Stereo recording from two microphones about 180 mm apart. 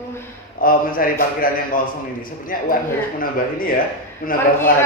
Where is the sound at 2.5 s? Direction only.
50° left (ahead or behind).